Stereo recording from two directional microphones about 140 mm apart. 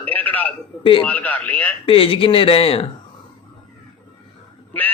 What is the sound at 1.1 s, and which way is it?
Speech, 10° left (ahead or behind).